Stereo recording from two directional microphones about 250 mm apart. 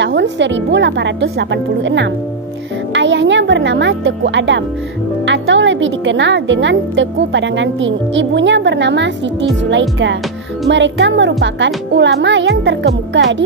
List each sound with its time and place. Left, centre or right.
0.0 s speech: right